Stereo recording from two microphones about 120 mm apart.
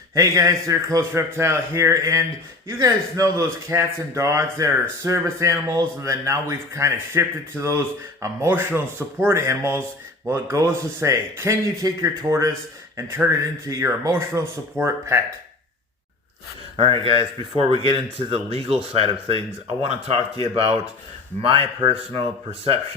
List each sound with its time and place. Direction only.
0.1 s a man's voice: 30° right (ahead or behind)
16.7 s speech: 50° right (ahead or behind)
20.4 s speech: 50° right (ahead or behind)